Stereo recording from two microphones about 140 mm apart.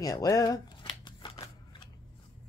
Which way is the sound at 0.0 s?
25° left (ahead or behind).